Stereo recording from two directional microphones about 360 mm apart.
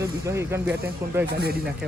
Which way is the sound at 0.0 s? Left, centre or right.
Centre.